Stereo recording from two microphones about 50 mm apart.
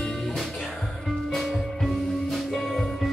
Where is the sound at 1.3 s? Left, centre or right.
Centre.